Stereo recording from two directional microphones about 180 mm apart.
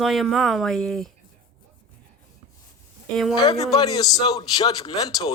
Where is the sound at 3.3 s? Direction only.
20° left (ahead or behind).